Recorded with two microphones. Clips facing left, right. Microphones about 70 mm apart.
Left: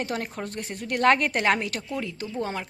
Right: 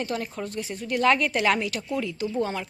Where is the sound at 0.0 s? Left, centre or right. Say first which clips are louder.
Even; left.